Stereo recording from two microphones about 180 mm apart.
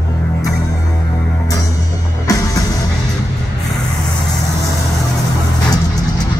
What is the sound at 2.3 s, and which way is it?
Music, 20° left (ahead or behind).